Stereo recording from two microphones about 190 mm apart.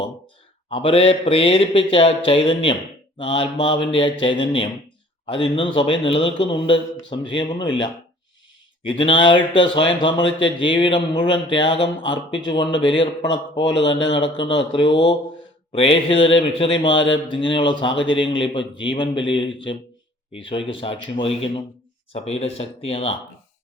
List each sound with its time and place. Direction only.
0.7 s speech: 30° left (ahead or behind)
13.8 s speech: 25° left (ahead or behind)